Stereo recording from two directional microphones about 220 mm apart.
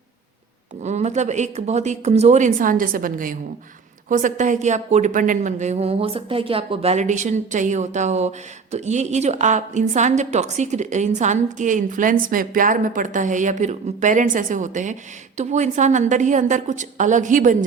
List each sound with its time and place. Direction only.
0.8 s a woman's voice: 30° right (ahead or behind)